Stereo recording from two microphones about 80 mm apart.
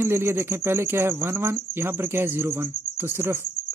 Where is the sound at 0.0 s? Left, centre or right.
Right.